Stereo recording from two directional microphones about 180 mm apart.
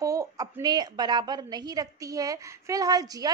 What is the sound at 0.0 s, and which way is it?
A woman's voice, 20° right (ahead or behind).